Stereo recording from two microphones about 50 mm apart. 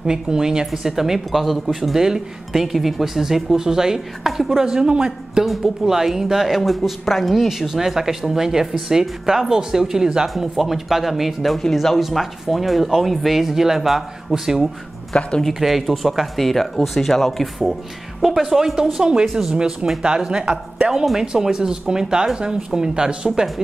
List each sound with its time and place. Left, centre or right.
0.0 s speech: centre
18.2 s speech: centre
19.2 s speech: centre
19.5 s speech: centre